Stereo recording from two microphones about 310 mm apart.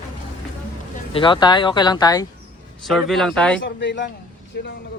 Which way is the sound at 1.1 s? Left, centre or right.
Centre.